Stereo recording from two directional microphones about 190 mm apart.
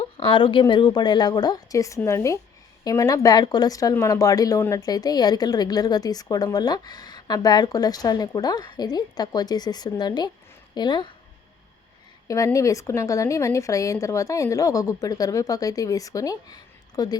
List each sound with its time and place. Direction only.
0.0 s speech: 25° left (ahead or behind)
12.3 s a woman's voice: 15° left (ahead or behind)